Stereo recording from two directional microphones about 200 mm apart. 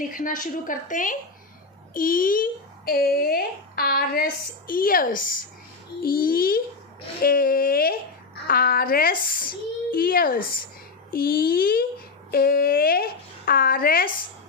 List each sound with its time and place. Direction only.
0.1 s a woman's voice: 40° left (ahead or behind)